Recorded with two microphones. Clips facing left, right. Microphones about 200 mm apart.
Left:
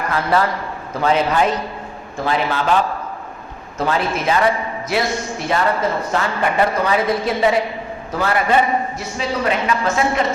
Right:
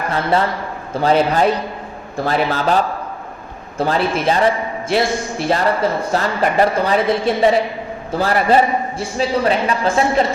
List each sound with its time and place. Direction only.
0.1 s a man's voice: 25° right (ahead or behind)